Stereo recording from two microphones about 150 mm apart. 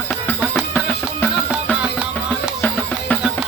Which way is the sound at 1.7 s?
5° right (ahead or behind).